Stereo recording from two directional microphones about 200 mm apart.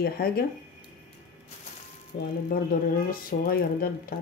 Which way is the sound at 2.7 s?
45° left (ahead or behind).